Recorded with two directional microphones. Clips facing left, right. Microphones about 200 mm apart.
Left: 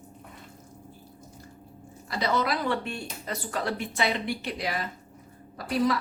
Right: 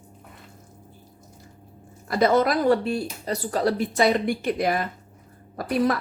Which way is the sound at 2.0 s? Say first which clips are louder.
Right 8 dB; 50° right (ahead or behind).